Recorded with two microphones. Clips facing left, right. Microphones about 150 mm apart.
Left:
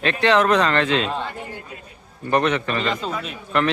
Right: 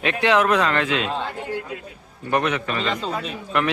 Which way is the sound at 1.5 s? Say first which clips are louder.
Right 8 dB; 85° right.